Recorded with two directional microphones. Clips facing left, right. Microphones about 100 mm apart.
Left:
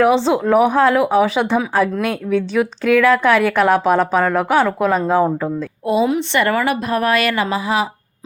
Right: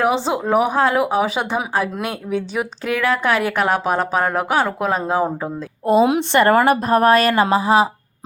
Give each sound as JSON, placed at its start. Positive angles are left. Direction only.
{"t": 0.0, "sound": "speech", "side_deg": -5}
{"t": 4.2, "sound": "a woman's voice", "side_deg": -15}
{"t": 4.4, "sound": "a woman's voice", "side_deg": -5}
{"t": 5.5, "sound": "a woman's voice", "side_deg": -40}